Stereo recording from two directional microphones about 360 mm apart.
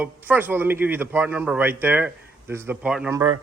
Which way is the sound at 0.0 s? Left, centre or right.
Centre.